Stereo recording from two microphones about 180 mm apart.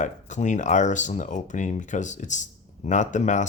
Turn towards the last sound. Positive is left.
turn(degrees=45)  # may be behind; listen again after turning